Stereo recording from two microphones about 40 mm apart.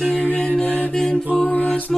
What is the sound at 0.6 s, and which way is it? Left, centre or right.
A capella, left.